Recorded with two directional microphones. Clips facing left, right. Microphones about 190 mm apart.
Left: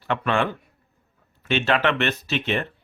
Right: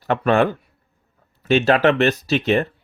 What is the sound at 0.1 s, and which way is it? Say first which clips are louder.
Speech: right 6 dB; 40° right (ahead or behind).